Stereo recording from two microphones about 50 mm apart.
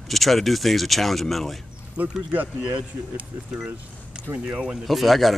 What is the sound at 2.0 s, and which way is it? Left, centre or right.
Speech, right.